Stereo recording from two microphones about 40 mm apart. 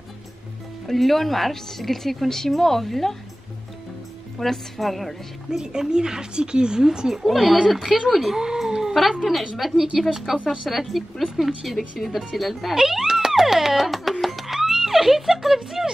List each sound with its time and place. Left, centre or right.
0.8 s a woman's voice: centre
4.4 s a woman's voice: centre
5.5 s speech: centre
7.2 s a woman's voice: centre
8.4 s dog: centre
9.2 s a woman's voice: centre
12.7 s music: centre